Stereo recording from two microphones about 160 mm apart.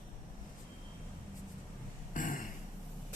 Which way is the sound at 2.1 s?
55° left (ahead or behind).